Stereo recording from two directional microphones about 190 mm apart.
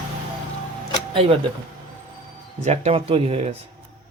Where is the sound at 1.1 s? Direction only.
30° right (ahead or behind).